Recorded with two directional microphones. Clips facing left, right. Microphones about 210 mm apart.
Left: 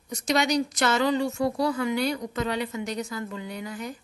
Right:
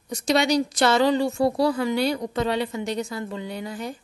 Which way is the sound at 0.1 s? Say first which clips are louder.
Right 3 dB; 30° right (ahead or behind).